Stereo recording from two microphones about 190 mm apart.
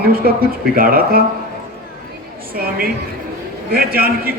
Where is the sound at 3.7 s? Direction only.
50° right (ahead or behind).